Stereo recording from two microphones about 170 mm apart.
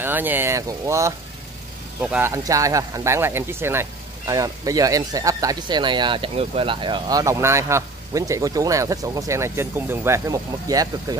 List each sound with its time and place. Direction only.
0.0 s speech: 10° right (ahead or behind)